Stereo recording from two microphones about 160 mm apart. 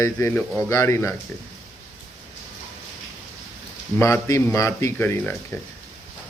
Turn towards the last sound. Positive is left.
turn(degrees=15)  # may be behind; listen again after turning